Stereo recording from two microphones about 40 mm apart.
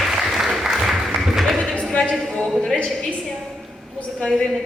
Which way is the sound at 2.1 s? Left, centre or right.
Centre.